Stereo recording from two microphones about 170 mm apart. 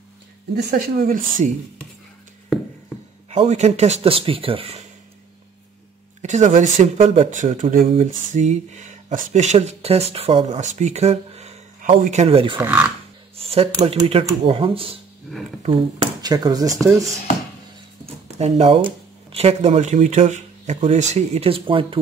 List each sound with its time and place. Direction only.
0.6 s speech: 65° right (ahead or behind)
2.5 s a sound: centre (ahead or behind)
3.3 s speech: 45° right (ahead or behind)
6.2 s speech: 45° right (ahead or behind)
7.9 s speech: 45° right (ahead or behind)
12.5 s speech: 10° right (ahead or behind)
13.4 s a sound: 35° right (ahead or behind)
14.0 s speech: 35° right (ahead or behind)
18.4 s speech: 35° right (ahead or behind)